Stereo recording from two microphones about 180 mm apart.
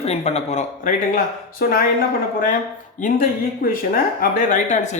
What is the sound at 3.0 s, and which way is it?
Speech, 50° left (ahead or behind).